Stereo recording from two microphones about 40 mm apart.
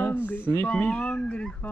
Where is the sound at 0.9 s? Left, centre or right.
Left.